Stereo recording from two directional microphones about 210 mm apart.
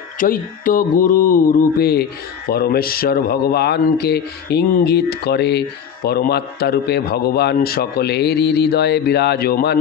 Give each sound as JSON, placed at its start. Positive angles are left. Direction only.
{"t": 0.2, "sound": "mantra", "side_deg": 40}
{"t": 2.5, "sound": "a man's voice", "side_deg": 45}